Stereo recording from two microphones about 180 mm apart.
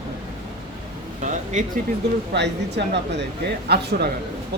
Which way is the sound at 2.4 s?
70° right (ahead or behind).